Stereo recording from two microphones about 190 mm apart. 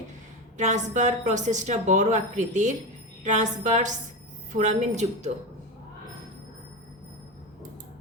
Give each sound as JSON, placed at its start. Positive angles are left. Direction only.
{"t": 0.5, "sound": "a woman's voice", "side_deg": -40}